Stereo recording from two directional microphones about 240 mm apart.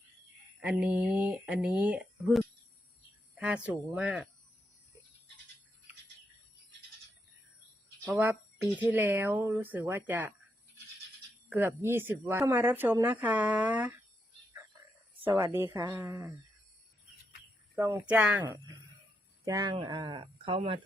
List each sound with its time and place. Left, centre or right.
0.7 s speech: centre
8.0 s speech: centre
11.4 s speech: centre
15.2 s speech: centre
17.7 s speech: centre